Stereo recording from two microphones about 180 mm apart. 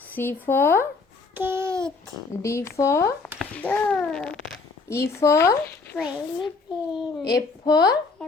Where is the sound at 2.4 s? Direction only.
15° left (ahead or behind).